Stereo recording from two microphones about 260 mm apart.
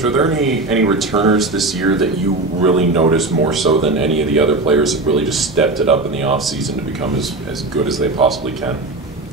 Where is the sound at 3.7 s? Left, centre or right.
Right.